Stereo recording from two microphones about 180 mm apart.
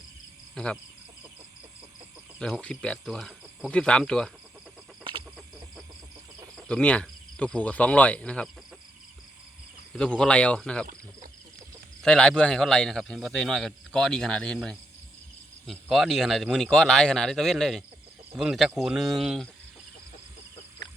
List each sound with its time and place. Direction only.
0.5 s speech: 5° left (ahead or behind)
2.4 s a man's voice: 5° left (ahead or behind)
6.6 s speech: 5° left (ahead or behind)
9.9 s a man's voice: 5° left (ahead or behind)
12.0 s a man's voice: 5° left (ahead or behind)